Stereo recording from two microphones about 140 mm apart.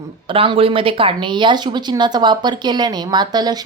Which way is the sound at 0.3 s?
40° right (ahead or behind).